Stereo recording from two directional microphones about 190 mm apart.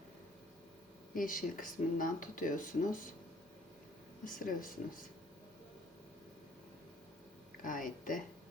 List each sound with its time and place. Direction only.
1.1 s speech: 45° left (ahead or behind)
4.3 s speech: 45° left (ahead or behind)
7.6 s speech: 45° left (ahead or behind)